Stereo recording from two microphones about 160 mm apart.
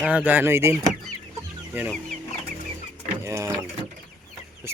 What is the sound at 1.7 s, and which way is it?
Speech, 10° right (ahead or behind).